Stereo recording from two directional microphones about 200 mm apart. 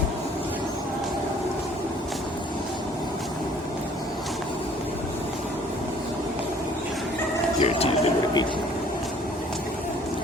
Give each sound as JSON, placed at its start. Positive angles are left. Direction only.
{"t": 7.6, "sound": "speech", "side_deg": 30}